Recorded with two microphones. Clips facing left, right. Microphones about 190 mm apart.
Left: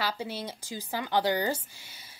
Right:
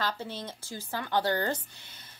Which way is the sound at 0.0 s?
10° left (ahead or behind).